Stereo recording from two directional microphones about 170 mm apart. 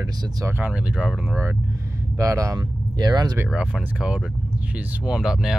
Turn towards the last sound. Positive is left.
turn(degrees=-5)  # may be behind; listen again after turning